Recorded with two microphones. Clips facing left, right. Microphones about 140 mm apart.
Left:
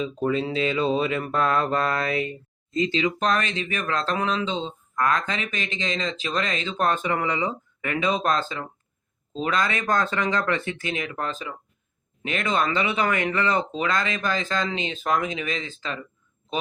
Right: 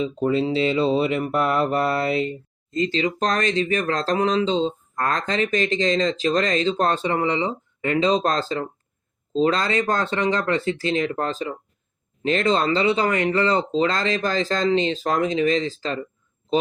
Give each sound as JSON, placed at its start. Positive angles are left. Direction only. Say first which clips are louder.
{"t": 0.3, "sound": "mantra", "louder": "right 4 dB", "side_deg": -30}
{"t": 2.7, "sound": "speech", "louder": "right 1 dB", "side_deg": -40}